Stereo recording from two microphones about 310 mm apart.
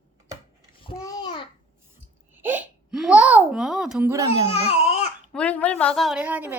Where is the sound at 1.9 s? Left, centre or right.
Centre.